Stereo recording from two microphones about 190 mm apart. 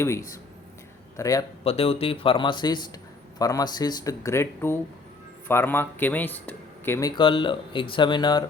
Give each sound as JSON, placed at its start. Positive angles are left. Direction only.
{"t": 0.0, "sound": "a man's voice", "side_deg": 15}
{"t": 1.6, "sound": "a man's voice", "side_deg": 30}
{"t": 7.2, "sound": "a man's voice", "side_deg": 25}